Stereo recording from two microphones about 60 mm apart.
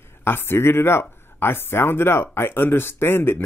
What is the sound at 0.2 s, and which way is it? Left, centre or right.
Speech, left.